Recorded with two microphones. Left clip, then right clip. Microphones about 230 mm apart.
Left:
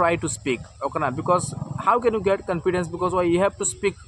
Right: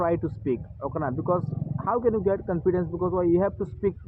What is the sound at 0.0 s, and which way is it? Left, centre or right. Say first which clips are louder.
A man's voice: left 4 dB; left.